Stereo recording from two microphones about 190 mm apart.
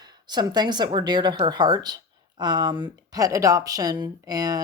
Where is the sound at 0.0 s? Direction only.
20° right (ahead or behind).